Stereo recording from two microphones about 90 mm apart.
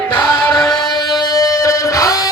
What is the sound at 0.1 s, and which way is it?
Music, 50° left (ahead or behind).